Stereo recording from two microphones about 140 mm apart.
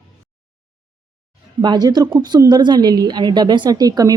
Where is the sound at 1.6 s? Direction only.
30° right (ahead or behind).